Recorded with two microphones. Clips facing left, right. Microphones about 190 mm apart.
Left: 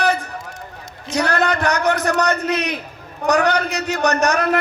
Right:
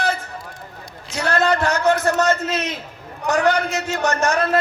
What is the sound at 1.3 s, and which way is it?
A man's voice, 20° left (ahead or behind).